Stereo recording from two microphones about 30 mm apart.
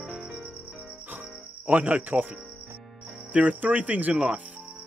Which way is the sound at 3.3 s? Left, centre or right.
Right.